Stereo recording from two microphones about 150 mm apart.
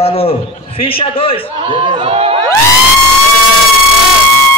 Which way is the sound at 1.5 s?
35° right (ahead or behind).